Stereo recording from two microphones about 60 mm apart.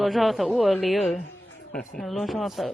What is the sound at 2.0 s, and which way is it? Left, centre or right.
Speech, centre.